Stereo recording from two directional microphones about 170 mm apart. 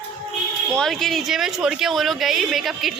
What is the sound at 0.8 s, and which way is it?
Speech, centre (ahead or behind).